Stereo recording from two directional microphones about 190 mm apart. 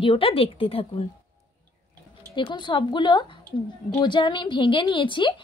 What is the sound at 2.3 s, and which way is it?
Speech, 25° left (ahead or behind).